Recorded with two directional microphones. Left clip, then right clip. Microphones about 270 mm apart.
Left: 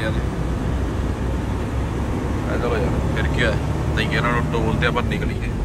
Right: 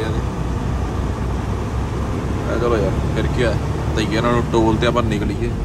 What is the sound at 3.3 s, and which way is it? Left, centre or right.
Speech, centre.